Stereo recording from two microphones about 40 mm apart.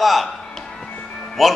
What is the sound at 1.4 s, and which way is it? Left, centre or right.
Speech, centre.